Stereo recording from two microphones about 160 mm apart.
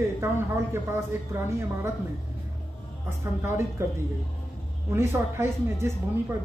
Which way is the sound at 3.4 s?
15° right (ahead or behind).